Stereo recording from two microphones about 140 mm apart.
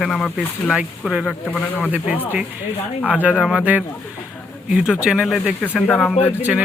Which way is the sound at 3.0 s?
10° right (ahead or behind).